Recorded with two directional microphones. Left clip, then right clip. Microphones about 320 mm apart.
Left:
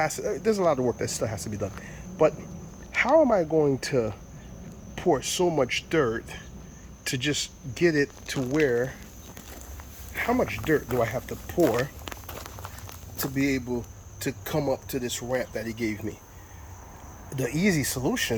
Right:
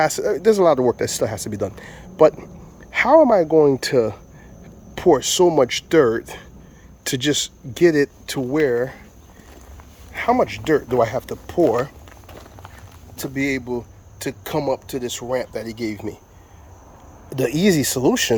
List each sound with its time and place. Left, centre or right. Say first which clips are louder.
0.0 s speech: right 9 dB; centre
7.8 s speech: right 8 dB; centre
10.1 s speech: right 8 dB; centre
13.2 s speech: right 4 dB; centre
17.3 s speech: right 8 dB; centre